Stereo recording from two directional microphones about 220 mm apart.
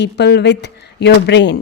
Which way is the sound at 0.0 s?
50° left (ahead or behind).